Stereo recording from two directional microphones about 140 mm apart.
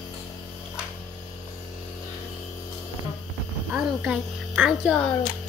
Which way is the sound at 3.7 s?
10° right (ahead or behind).